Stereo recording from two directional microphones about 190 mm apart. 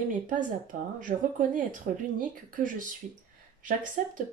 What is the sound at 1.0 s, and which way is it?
Speech, 45° right (ahead or behind).